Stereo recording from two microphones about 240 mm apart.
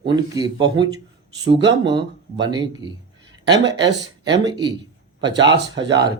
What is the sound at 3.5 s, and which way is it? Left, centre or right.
Speech, right.